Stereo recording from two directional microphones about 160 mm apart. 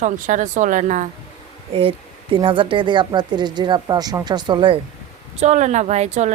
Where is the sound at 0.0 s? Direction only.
50° right (ahead or behind).